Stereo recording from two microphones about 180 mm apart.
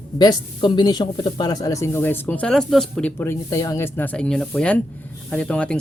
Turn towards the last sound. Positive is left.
turn(degrees=5)  # may be behind; listen again after turning